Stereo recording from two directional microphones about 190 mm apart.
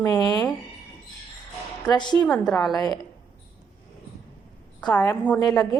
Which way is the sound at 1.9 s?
25° left (ahead or behind).